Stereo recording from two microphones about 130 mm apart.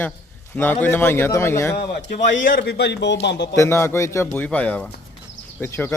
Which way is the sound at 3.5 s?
20° left (ahead or behind).